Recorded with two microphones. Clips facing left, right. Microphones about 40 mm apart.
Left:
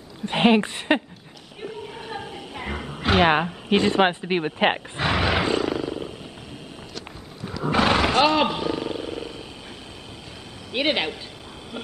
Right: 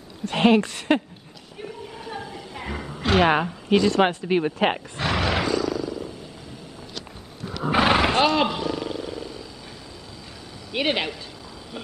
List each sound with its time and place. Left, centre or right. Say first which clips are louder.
0.2 s speech: even; left
2.0 s a sound: left 1 dB; left
3.0 s a sound: even; centre
3.7 s speech: even; left; by 5.4 s centre
5.4 s wild animals: left 1 dB; left
7.6 s horse: right 1 dB; centre
8.4 s speech: left 1 dB; centre
8.8 s wild animals: left 1 dB; left
9.1 s wild animals: left 1 dB; left
10.7 s speech: left 1 dB; centre